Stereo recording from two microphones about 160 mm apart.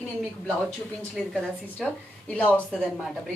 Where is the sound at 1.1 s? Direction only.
5° left (ahead or behind).